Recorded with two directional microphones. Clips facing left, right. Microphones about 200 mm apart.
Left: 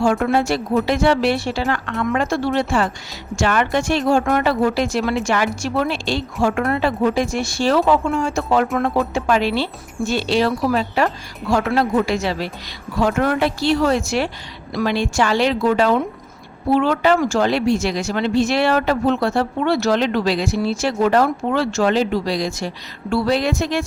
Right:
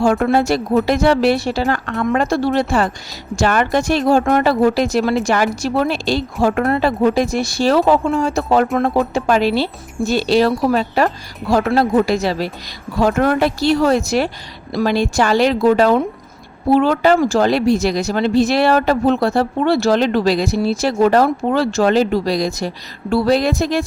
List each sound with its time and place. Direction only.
0.0 s speech: 40° right (ahead or behind)